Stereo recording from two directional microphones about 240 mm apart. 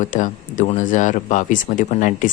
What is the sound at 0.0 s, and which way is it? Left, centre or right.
Speech, left.